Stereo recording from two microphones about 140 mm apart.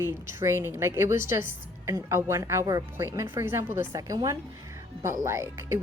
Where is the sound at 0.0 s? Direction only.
20° right (ahead or behind).